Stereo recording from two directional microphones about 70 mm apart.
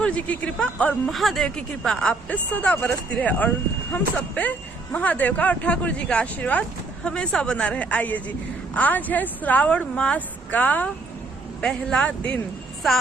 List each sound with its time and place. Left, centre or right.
0.0 s speech: centre
1.0 s speech: centre
1.5 s speech: centre
11.6 s speech: centre